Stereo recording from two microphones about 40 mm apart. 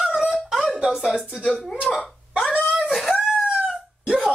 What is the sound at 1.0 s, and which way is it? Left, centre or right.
Speech, centre.